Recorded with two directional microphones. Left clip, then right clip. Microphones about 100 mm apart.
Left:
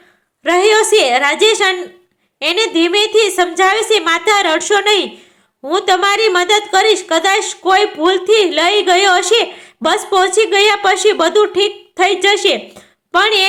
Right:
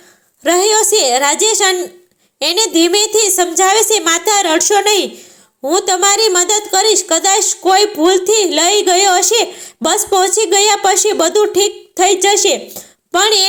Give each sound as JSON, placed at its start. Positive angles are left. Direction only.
{"t": 0.4, "sound": "a woman's voice", "side_deg": -45}